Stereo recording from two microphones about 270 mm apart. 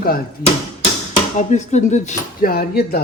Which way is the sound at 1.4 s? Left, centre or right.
Left.